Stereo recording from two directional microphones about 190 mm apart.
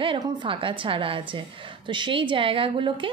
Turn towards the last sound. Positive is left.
turn(degrees=-25)  # may be behind; listen again after turning